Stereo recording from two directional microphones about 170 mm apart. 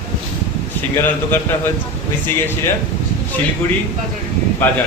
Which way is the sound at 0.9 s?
10° left (ahead or behind).